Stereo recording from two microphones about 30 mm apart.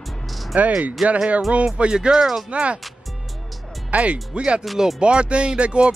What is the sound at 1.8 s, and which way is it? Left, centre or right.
Speech, right.